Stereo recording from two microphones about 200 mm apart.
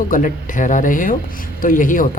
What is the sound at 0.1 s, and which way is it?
Speech, 40° left (ahead or behind).